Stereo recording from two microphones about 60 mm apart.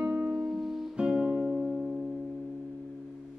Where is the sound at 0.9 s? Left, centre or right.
Centre.